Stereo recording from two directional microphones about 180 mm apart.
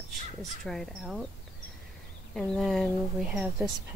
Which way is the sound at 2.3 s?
Centre (ahead or behind).